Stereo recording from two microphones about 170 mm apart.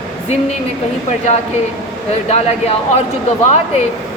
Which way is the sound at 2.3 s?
40° left (ahead or behind).